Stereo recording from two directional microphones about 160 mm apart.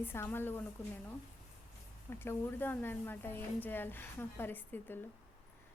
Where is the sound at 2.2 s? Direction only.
15° left (ahead or behind).